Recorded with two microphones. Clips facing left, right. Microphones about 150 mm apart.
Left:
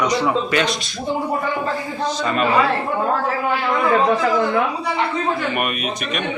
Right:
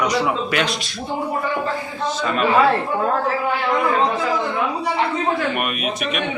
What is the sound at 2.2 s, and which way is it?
Speech, centre (ahead or behind).